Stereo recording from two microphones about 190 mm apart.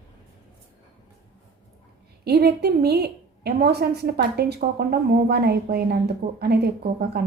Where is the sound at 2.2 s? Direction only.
60° right (ahead or behind).